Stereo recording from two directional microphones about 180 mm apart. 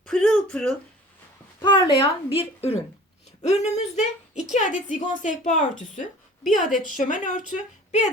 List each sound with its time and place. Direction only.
0.0 s a sound: 5° left (ahead or behind)
1.6 s a woman's voice: 30° left (ahead or behind)
6.4 s a woman's voice: centre (ahead or behind)
6.7 s a woman's voice: 45° left (ahead or behind)